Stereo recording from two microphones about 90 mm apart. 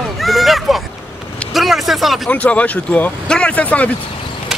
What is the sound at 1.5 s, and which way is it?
Vehicle, centre (ahead or behind).